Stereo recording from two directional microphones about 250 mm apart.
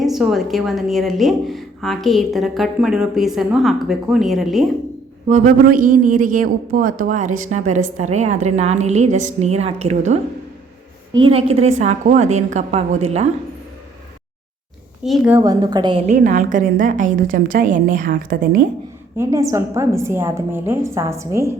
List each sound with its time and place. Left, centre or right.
0.0 s a woman's voice: centre
5.3 s a woman's voice: right
11.2 s a woman's voice: right
15.0 s a woman's voice: centre; by 18.6 s right
19.1 s a woman's voice: centre